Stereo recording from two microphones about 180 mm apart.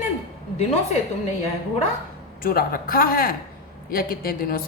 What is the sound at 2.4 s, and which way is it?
A woman's voice, 55° left (ahead or behind).